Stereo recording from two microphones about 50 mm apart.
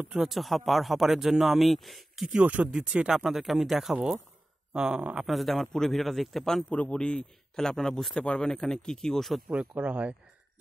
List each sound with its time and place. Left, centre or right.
0.2 s speech: centre
2.4 s speech: right
3.1 s speech: centre
5.2 s a man's voice: centre
6.7 s a man's voice: left
7.0 s a man's voice: centre
9.5 s speech: right